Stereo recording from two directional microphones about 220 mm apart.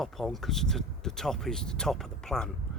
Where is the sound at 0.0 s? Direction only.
Centre (ahead or behind).